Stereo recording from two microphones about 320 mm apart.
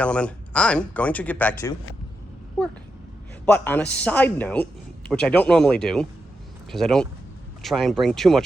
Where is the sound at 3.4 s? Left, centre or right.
Centre.